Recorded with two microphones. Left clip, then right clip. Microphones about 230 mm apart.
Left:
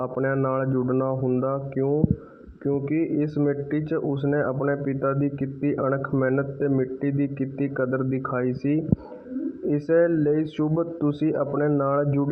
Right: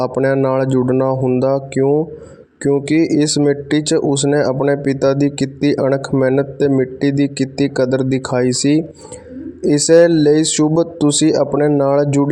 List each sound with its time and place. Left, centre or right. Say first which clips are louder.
0.0 s speech: right 10 dB; right
10.6 s speech: right 10 dB; right